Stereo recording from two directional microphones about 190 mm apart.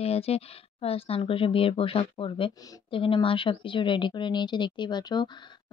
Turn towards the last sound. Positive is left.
turn(degrees=25)  # may be behind; listen again after turning